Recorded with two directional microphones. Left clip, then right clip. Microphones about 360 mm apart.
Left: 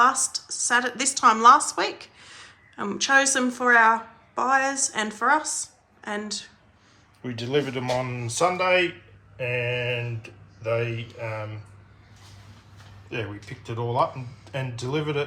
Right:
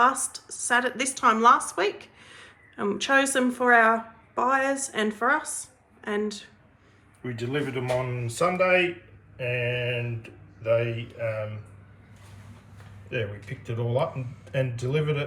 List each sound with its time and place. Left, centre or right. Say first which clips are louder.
0.0 s a woman's voice: left 2 dB; centre
7.3 s speech: left 4 dB; left
13.7 s speech: left 3 dB; centre